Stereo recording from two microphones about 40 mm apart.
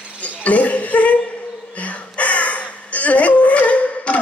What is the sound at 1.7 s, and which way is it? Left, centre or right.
Crow, left.